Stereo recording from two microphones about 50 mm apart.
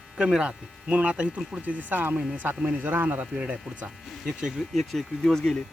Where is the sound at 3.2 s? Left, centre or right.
Centre.